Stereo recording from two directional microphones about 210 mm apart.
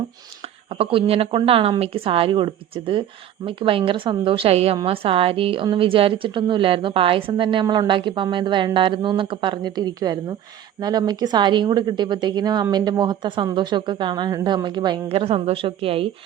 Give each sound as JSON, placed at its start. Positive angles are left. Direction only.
{"t": 0.7, "sound": "a woman's voice", "side_deg": -25}